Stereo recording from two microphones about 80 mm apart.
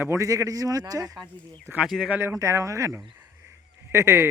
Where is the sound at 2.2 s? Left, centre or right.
Right.